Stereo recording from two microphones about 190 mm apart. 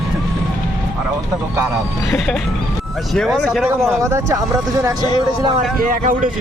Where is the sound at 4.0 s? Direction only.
15° right (ahead or behind).